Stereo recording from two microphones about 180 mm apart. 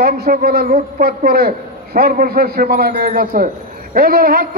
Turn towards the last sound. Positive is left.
turn(degrees=-55)  # may be behind; listen again after turning